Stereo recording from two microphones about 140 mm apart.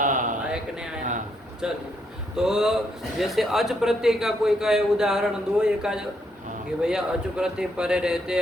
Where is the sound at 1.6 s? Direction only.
5° right (ahead or behind).